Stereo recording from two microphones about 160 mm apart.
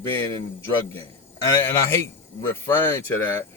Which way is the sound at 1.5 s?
15° left (ahead or behind).